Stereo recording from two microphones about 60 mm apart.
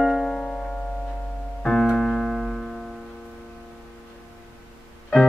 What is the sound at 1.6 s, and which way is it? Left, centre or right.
Piano, centre.